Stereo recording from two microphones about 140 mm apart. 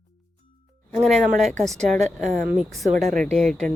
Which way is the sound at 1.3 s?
60° right (ahead or behind).